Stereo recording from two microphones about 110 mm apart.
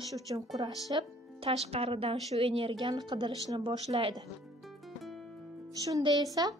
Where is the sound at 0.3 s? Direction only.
50° right (ahead or behind).